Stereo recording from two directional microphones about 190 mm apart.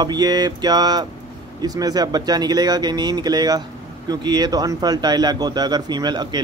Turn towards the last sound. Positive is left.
turn(degrees=-20)  # may be behind; listen again after turning